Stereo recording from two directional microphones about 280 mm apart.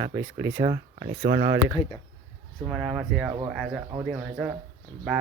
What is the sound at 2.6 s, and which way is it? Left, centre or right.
Speech, centre.